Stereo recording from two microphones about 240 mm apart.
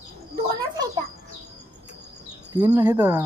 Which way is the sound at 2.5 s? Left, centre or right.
Centre.